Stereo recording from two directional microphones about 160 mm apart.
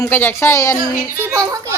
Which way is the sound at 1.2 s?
15° right (ahead or behind).